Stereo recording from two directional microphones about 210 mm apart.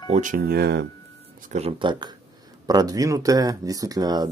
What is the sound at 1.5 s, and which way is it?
Speech, 30° right (ahead or behind).